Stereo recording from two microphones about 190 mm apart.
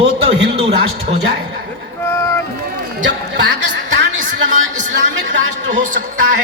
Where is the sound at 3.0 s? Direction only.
70° right (ahead or behind).